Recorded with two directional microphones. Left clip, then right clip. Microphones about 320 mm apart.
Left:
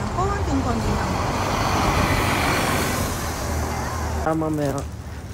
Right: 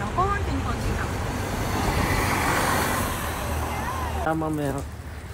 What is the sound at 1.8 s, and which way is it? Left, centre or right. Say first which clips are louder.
Vehicle: left 4 dB; centre.